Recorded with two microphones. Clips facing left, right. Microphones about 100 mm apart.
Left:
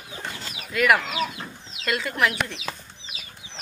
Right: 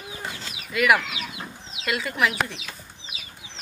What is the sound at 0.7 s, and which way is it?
Speech, centre (ahead or behind).